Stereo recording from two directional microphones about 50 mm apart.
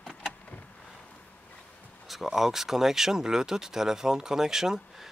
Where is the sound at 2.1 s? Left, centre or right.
Centre.